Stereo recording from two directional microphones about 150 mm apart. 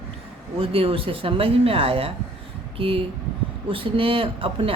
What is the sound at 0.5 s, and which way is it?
Speech, 40° right (ahead or behind).